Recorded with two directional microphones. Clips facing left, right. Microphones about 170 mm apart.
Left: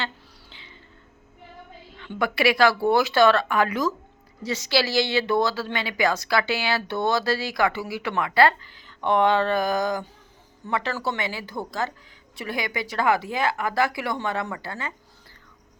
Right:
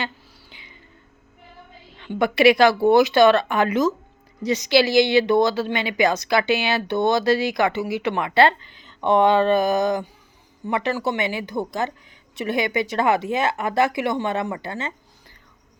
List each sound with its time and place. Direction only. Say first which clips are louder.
0.5 s whispering: even; 15° right (ahead or behind)
2.0 s a woman's voice: right 6 dB; 20° right (ahead or behind)